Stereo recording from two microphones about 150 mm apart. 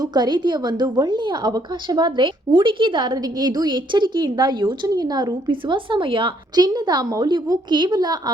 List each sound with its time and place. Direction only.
0.0 s a woman's voice: 30° right (ahead or behind)